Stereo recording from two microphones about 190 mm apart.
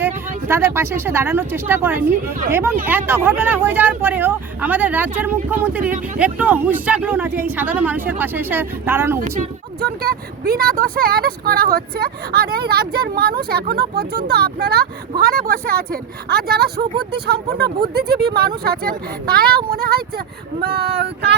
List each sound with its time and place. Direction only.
0.0 s speech: 10° right (ahead or behind)
9.8 s speech: 55° right (ahead or behind)